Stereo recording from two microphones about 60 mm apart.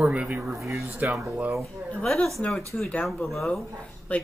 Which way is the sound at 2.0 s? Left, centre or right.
Centre.